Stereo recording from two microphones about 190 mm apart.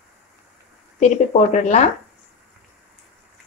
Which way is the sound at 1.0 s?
40° left (ahead or behind).